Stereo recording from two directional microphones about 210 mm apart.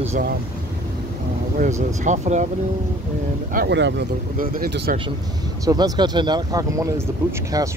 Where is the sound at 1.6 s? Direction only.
35° right (ahead or behind).